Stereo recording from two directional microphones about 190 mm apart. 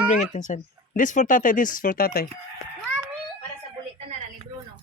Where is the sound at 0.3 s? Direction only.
40° left (ahead or behind).